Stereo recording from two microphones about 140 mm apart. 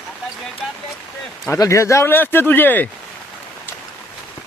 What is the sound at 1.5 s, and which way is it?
Speech, 20° left (ahead or behind).